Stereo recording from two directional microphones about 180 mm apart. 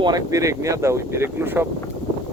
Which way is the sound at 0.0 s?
20° right (ahead or behind).